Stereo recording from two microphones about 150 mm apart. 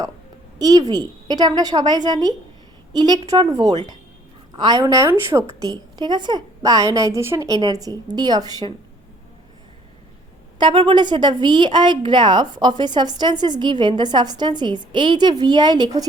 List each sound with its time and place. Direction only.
0.6 s a woman's voice: 25° right (ahead or behind)
10.6 s a woman's voice: 35° right (ahead or behind)